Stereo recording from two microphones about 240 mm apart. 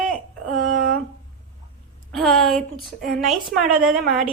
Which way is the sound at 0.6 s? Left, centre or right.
Right.